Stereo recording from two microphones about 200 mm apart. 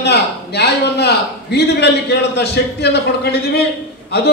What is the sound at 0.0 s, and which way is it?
A man's voice, 55° left (ahead or behind).